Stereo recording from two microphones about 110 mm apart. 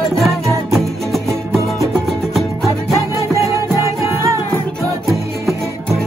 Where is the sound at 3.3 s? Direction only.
25° right (ahead or behind).